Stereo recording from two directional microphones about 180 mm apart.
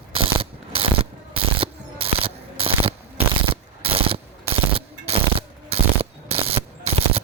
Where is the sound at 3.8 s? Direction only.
30° right (ahead or behind).